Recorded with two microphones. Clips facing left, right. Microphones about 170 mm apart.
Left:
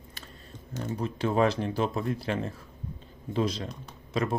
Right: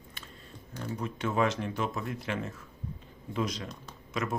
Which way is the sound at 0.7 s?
30° left (ahead or behind).